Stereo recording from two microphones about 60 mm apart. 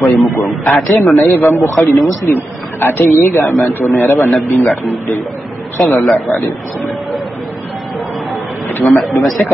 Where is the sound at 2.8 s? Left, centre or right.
Left.